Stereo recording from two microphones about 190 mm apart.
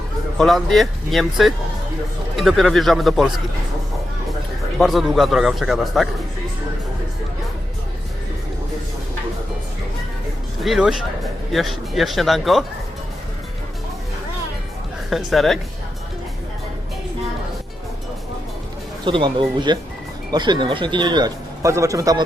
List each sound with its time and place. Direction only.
0.3 s speech: centre (ahead or behind)
4.8 s speech: centre (ahead or behind)
10.6 s speech: centre (ahead or behind)
15.1 s speech: centre (ahead or behind)
19.0 s speech: 25° right (ahead or behind)